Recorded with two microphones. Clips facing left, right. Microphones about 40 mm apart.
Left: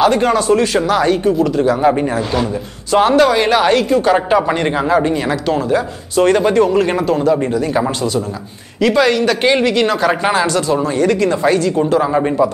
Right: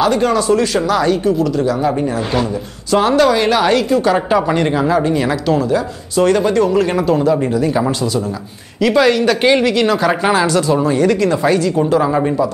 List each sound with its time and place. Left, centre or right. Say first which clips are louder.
0.0 s speech: left 1 dB; centre
2.9 s speech: left 1 dB; centre
8.8 s speech: right 1 dB; centre